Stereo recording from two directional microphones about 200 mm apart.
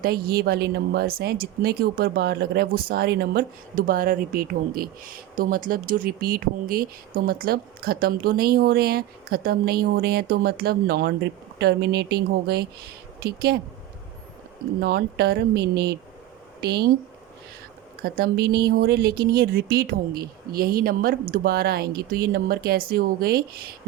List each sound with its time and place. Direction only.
0.0 s speech: 50° right (ahead or behind)
14.8 s speech: 55° right (ahead or behind)
18.0 s speech: 50° right (ahead or behind)